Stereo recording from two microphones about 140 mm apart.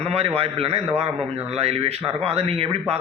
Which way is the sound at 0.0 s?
45° right (ahead or behind).